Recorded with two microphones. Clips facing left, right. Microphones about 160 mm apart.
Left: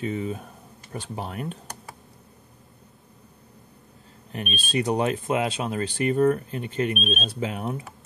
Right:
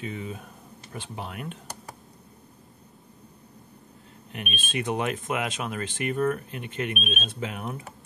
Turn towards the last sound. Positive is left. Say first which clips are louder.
# left 4 dB
turn(degrees=35)  # may be behind; listen again after turning